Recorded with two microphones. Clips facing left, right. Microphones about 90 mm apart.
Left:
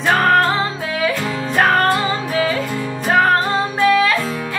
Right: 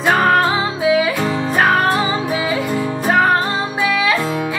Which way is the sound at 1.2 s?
30° right (ahead or behind).